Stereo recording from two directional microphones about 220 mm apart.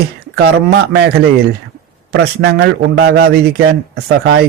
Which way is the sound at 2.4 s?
50° right (ahead or behind).